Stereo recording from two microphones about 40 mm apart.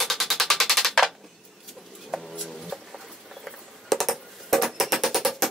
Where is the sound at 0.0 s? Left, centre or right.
Centre.